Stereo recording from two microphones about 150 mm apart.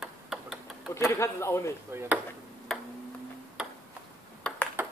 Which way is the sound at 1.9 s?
15° right (ahead or behind).